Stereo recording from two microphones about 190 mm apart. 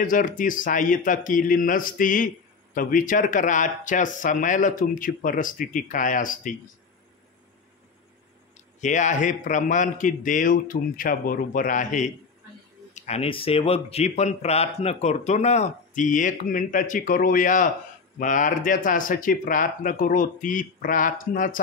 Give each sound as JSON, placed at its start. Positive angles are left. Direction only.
{"t": 0.0, "sound": "a man's voice", "side_deg": 45}
{"t": 8.8, "sound": "a man's voice", "side_deg": 40}